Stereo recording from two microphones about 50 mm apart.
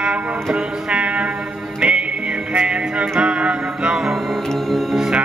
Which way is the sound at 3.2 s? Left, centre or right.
Right.